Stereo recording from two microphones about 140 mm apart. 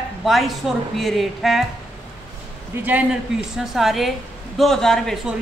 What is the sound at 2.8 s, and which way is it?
A woman's voice, 10° right (ahead or behind).